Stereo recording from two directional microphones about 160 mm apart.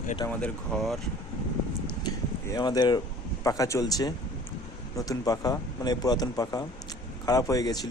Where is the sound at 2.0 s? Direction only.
25° left (ahead or behind).